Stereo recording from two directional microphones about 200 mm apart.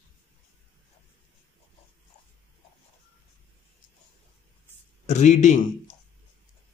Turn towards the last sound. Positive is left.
turn(degrees=35)  # may be behind; listen again after turning